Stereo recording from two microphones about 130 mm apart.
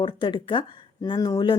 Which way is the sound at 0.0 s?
40° left (ahead or behind).